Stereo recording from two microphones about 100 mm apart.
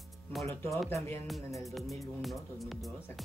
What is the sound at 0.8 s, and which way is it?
Speech, 20° left (ahead or behind).